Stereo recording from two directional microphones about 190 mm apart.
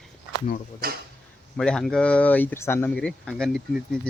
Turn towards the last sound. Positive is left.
turn(degrees=0)  # may be behind; listen again after turning